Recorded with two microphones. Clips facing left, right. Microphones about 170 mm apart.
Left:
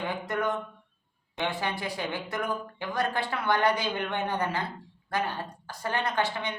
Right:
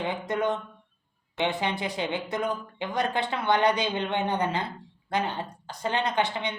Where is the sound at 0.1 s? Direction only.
20° right (ahead or behind).